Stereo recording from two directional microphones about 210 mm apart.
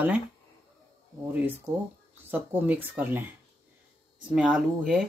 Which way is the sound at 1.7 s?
15° right (ahead or behind).